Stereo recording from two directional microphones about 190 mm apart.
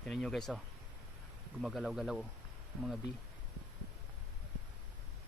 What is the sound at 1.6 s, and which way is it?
Speech, centre (ahead or behind).